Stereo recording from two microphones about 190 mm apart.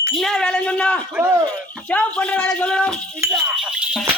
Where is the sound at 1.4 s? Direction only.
5° left (ahead or behind).